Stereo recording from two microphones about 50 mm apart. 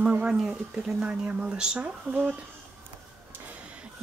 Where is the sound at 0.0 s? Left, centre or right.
Right.